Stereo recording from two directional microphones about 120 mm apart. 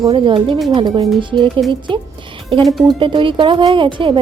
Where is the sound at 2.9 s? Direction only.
45° right (ahead or behind).